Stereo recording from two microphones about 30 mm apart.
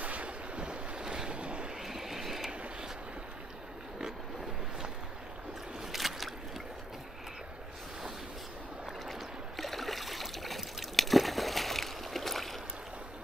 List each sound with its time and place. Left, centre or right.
0.0 s boat: right
0.6 s waves: right
1.8 s vehicle: centre
5.9 s boat: centre
9.0 s boat: centre